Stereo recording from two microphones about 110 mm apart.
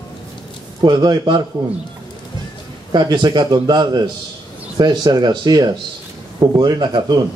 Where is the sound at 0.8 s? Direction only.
40° right (ahead or behind).